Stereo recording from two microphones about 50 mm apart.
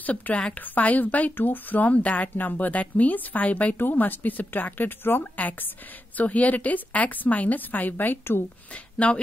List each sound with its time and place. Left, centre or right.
0.0 s speech: left
8.9 s speech: left